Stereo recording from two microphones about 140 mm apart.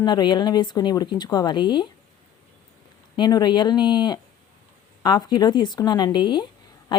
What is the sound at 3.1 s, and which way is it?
Speech, 30° left (ahead or behind).